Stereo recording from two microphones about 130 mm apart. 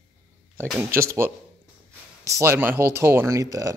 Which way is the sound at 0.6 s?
20° right (ahead or behind).